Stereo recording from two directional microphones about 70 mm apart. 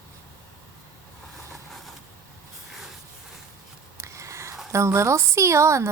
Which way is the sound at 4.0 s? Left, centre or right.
Right.